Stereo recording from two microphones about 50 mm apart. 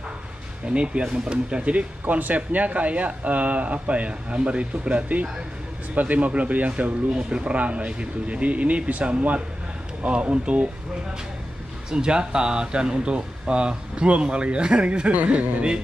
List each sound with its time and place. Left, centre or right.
0.7 s speech: right
11.9 s speech: centre